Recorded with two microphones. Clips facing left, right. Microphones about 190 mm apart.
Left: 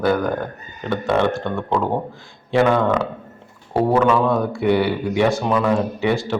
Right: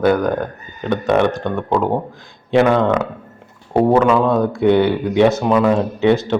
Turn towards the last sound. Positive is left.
turn(degrees=-20)  # may be behind; listen again after turning